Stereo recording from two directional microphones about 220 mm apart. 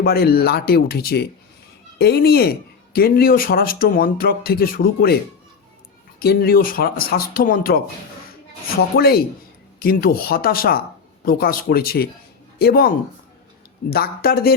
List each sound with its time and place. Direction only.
0.0 s speech: 45° left (ahead or behind)
6.1 s speech: 45° left (ahead or behind)
9.0 s speech: 45° left (ahead or behind)